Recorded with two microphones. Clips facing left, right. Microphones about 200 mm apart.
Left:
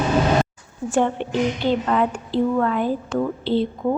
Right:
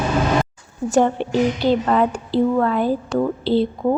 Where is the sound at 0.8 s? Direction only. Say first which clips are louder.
Right 3 dB; 40° right (ahead or behind).